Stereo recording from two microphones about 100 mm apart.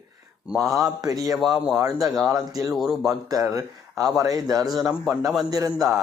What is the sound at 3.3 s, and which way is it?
Speech, 35° right (ahead or behind).